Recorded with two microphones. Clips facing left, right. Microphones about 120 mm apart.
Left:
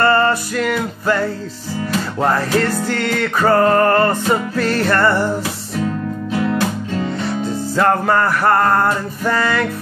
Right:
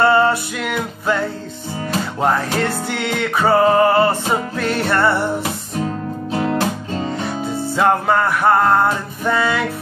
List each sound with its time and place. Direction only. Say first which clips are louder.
0.0 s music: right 1 dB; 5° right (ahead or behind)
6.3 s music: even; 35° right (ahead or behind)
7.7 s music: left 1 dB; centre (ahead or behind)